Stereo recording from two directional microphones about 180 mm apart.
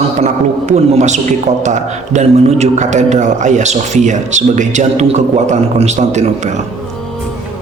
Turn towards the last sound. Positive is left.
turn(degrees=-40)  # may be behind; listen again after turning